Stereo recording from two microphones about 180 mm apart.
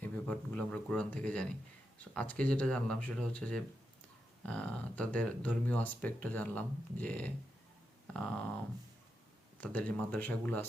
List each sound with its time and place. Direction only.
0.0 s speech: 10° left (ahead or behind)
8.0 s a sound: 5° left (ahead or behind)
9.6 s speech: 5° left (ahead or behind)